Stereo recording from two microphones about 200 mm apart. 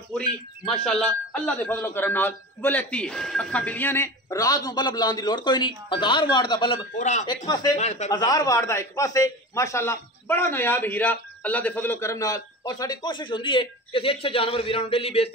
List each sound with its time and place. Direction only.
0.7 s a man's voice: 5° left (ahead or behind); by 6.9 s 25° left (ahead or behind)
7.0 s speech: 35° left (ahead or behind)
7.4 s speech: 20° left (ahead or behind)
7.7 s speech: 35° left (ahead or behind)
8.1 s a man's voice: 20° left (ahead or behind)